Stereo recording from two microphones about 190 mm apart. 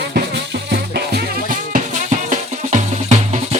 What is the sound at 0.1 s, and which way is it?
Music, 60° right (ahead or behind).